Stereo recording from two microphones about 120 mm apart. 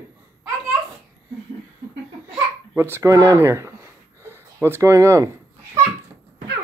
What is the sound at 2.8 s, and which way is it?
Speech, 20° right (ahead or behind).